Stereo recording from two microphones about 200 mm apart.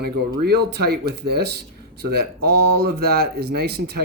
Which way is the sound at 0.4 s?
50° right (ahead or behind).